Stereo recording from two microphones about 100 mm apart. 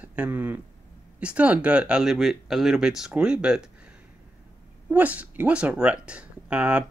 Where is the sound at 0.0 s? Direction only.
15° right (ahead or behind).